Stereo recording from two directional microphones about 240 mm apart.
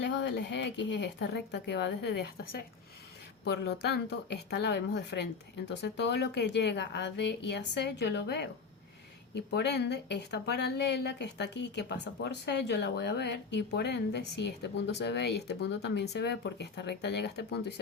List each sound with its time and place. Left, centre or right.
0.0 s a woman's voice: left